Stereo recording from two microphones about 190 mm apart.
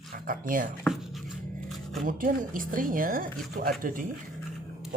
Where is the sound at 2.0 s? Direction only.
45° right (ahead or behind).